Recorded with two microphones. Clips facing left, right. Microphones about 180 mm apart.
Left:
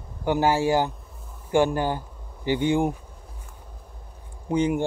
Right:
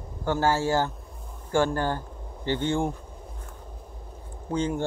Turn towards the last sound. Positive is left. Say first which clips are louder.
# left 4 dB
turn(degrees=10)  # may be behind; listen again after turning